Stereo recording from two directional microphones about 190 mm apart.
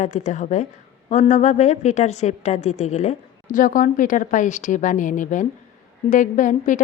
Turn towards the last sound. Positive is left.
turn(degrees=40)  # may be behind; listen again after turning